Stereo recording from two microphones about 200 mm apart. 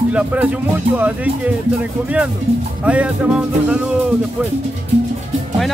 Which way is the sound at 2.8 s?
5° right (ahead or behind).